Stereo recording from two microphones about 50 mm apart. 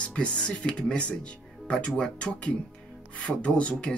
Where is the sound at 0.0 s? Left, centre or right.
Left.